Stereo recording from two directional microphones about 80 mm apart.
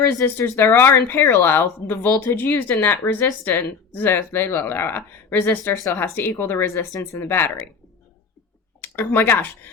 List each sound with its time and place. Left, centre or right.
0.3 s speech: left
8.8 s speech: left